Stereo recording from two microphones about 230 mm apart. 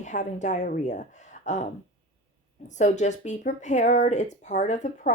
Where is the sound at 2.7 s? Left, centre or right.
Left.